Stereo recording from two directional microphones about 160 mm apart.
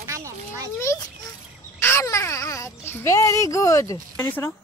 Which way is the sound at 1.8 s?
15° left (ahead or behind).